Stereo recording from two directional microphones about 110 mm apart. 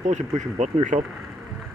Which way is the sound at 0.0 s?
90° right.